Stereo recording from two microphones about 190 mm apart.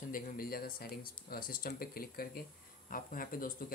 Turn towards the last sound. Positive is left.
turn(degrees=50)  # may be behind; listen again after turning